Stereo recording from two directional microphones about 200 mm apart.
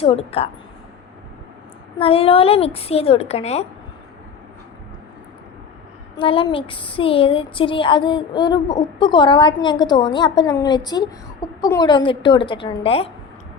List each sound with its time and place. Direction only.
0.0 s speech: 30° left (ahead or behind)
2.0 s speech: 30° left (ahead or behind)
6.1 s speech: 25° left (ahead or behind)